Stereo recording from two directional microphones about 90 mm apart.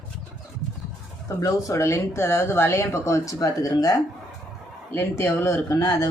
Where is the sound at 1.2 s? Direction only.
35° left (ahead or behind).